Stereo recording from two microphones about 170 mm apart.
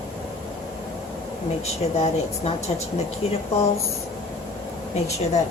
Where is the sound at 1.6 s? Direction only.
40° left (ahead or behind).